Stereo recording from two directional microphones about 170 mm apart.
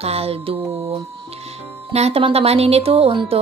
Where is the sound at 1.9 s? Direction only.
35° right (ahead or behind).